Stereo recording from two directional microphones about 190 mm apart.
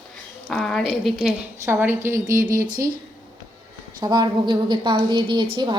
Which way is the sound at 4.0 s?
20° right (ahead or behind).